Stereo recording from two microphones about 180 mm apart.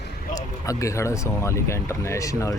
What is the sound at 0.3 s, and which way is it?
Speech, 20° left (ahead or behind).